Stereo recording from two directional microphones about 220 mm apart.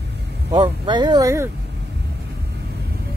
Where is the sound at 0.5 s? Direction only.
20° right (ahead or behind).